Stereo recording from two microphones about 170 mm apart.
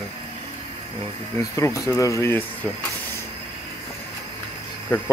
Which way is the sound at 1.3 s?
15° left (ahead or behind).